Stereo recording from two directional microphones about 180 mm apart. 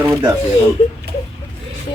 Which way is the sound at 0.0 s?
10° right (ahead or behind).